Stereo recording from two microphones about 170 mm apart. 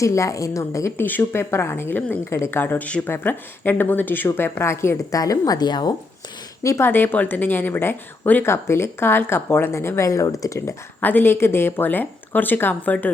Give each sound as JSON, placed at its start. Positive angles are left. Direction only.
{"t": 0.0, "sound": "speech", "side_deg": 20}